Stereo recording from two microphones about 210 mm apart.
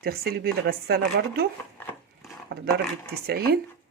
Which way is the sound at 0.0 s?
45° right (ahead or behind).